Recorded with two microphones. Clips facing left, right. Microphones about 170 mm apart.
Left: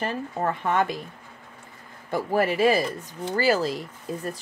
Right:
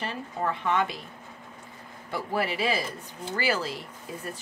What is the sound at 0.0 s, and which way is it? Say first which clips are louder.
Speech: left 4 dB; 45° left (ahead or behind).